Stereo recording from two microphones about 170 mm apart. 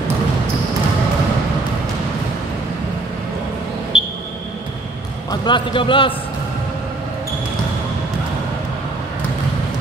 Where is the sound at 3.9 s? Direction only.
5° right (ahead or behind).